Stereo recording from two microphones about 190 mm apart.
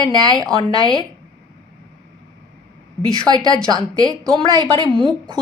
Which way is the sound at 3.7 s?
20° right (ahead or behind).